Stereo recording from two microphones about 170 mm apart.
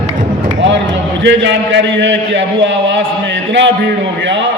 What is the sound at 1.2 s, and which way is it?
A man's voice, 90° right.